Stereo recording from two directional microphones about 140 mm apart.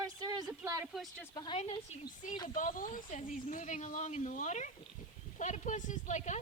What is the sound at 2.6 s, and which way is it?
A woman's voice, 75° left (ahead or behind).